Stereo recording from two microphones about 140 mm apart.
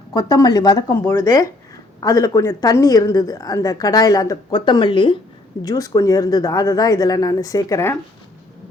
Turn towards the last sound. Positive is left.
turn(degrees=20)  # may be behind; listen again after turning